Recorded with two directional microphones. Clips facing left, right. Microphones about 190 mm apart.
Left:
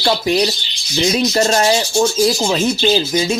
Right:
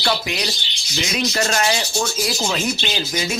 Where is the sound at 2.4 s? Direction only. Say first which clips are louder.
Left 8 dB; 25° left (ahead or behind).